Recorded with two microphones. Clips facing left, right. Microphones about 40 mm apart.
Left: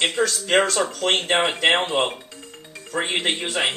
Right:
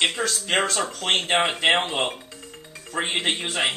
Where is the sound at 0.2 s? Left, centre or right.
Centre.